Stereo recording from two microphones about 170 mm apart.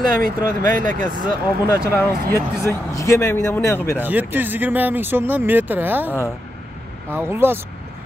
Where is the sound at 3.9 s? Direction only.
10° right (ahead or behind).